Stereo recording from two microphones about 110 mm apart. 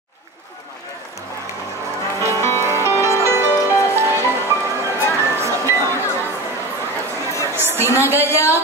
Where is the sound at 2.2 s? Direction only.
30° left (ahead or behind).